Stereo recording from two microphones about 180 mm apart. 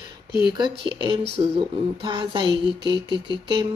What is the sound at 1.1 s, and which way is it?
Speech, 25° right (ahead or behind).